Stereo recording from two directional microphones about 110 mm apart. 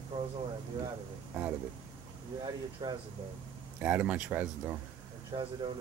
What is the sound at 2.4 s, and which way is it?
Speech, 40° right (ahead or behind).